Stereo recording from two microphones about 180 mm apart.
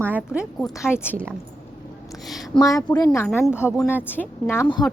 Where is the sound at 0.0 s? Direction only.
10° right (ahead or behind).